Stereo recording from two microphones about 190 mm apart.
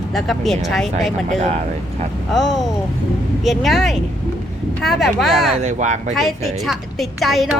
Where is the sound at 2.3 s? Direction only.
Centre (ahead or behind).